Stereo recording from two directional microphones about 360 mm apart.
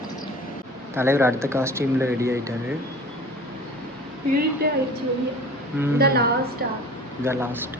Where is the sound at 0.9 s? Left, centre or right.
Centre.